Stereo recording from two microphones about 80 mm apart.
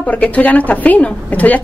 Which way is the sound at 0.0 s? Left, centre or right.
Centre.